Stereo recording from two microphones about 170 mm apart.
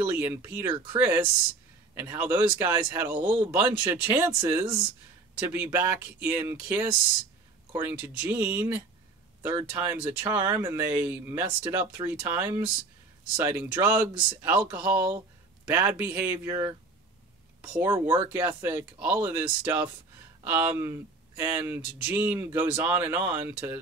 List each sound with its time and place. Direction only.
0.0 s speech: 10° right (ahead or behind)
3.2 s speech: 30° right (ahead or behind)
3.5 s speech: 15° right (ahead or behind)